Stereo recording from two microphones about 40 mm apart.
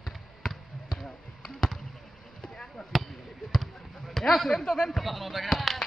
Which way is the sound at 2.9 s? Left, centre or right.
Centre.